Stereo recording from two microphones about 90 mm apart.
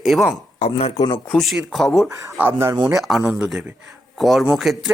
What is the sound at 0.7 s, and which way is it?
Speech, 80° left.